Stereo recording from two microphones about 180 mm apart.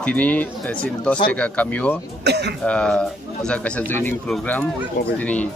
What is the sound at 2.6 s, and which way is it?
Speech, 5° left (ahead or behind).